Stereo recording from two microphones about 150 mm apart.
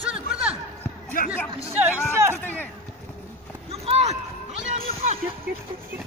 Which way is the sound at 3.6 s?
45° right (ahead or behind).